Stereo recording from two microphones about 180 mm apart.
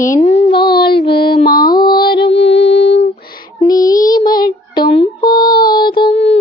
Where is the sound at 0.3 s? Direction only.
35° left (ahead or behind).